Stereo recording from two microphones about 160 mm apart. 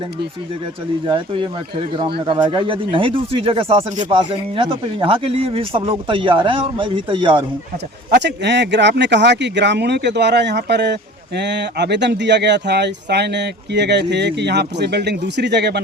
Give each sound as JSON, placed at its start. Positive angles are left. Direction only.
{"t": 1.0, "sound": "speech", "side_deg": -30}
{"t": 8.1, "sound": "speech", "side_deg": -90}